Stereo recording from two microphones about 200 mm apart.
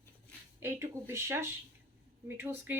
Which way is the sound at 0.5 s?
15° right (ahead or behind).